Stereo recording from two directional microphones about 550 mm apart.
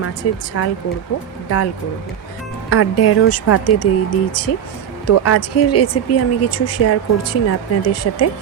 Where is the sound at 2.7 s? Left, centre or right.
Left.